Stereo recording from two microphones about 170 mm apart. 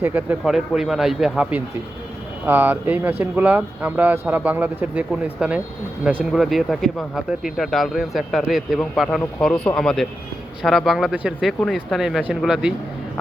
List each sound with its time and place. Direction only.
0.0 s speech: 10° right (ahead or behind)